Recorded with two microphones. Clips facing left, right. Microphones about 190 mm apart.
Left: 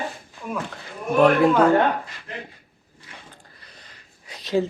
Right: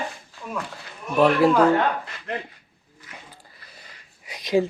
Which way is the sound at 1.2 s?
Centre (ahead or behind).